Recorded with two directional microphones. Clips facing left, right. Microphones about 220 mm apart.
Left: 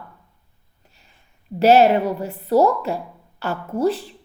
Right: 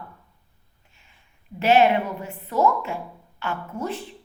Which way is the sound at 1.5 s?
40° left (ahead or behind).